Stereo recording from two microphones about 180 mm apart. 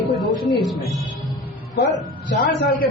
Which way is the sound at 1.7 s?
75° left (ahead or behind).